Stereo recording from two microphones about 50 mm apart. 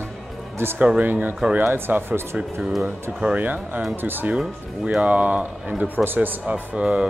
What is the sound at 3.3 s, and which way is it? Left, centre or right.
Speech, right.